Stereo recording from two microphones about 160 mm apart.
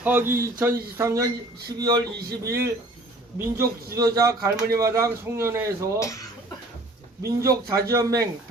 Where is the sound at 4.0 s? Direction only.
20° right (ahead or behind).